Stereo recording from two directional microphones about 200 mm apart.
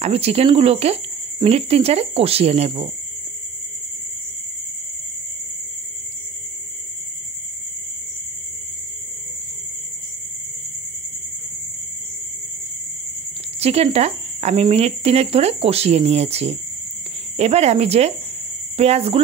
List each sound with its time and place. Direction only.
0.0 s speech: 30° right (ahead or behind)
13.6 s speech: 30° right (ahead or behind)